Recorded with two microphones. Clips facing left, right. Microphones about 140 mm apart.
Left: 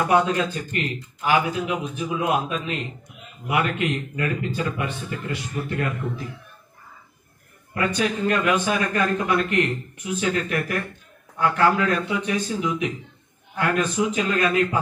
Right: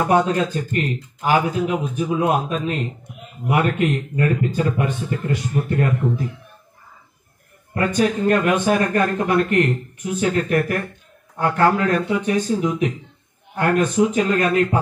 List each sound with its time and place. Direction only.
0.0 s a man's voice: 40° right (ahead or behind)
7.7 s speech: 40° right (ahead or behind)